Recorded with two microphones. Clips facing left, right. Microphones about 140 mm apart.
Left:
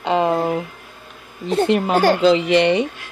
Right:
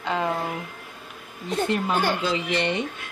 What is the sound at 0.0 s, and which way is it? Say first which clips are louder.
Speech: left 8 dB; 75° left (ahead or behind).